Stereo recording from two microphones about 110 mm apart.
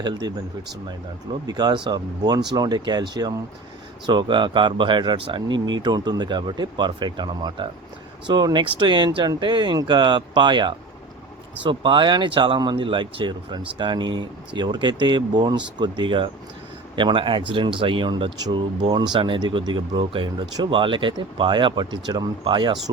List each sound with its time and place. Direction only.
0.0 s speech: 40° right (ahead or behind)
1.5 s speech: 40° right (ahead or behind)